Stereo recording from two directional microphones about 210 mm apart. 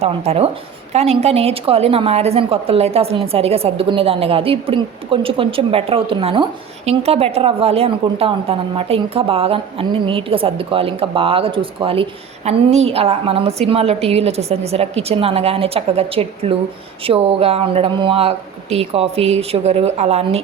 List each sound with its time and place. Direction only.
0.0 s a woman's voice: 30° right (ahead or behind)